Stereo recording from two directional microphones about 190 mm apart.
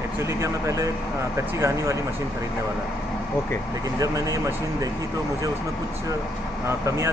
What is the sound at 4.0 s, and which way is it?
Speech, 15° right (ahead or behind).